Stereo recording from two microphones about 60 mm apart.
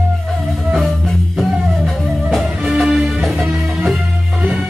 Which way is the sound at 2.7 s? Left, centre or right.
Centre.